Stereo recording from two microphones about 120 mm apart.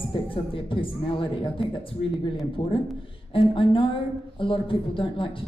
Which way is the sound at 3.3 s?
45° left (ahead or behind).